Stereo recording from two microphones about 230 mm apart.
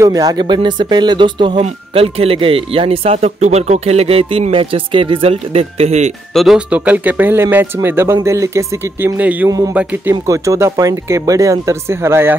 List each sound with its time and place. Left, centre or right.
0.0 s speech: centre
6.3 s speech: centre